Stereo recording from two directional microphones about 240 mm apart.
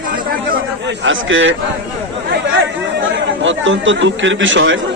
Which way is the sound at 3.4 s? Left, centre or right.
Right.